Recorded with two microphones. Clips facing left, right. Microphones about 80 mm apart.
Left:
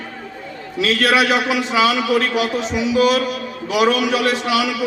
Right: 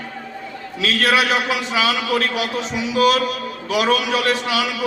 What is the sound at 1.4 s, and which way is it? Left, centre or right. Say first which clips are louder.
Speech: left 3 dB; left.